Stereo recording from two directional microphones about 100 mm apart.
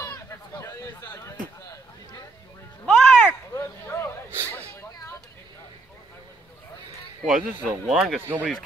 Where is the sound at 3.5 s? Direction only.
25° left (ahead or behind).